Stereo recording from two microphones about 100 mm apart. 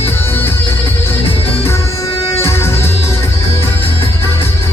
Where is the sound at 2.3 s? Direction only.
25° left (ahead or behind).